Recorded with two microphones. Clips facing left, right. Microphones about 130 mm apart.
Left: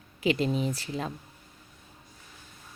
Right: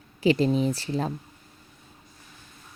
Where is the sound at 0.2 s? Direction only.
35° right (ahead or behind).